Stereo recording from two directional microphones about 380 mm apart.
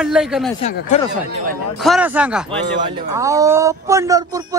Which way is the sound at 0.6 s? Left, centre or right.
Centre.